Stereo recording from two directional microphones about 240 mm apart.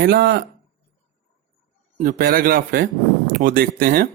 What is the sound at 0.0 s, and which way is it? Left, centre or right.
Speech, right.